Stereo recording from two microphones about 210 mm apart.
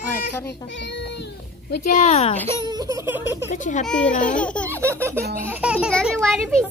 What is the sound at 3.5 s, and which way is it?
Speech, 35° left (ahead or behind).